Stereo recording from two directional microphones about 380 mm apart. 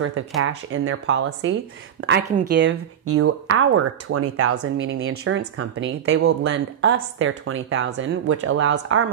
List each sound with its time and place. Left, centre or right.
0.5 s speech: right